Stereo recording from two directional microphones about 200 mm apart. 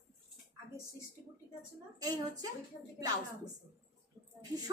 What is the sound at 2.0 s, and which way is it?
Speech, 20° right (ahead or behind).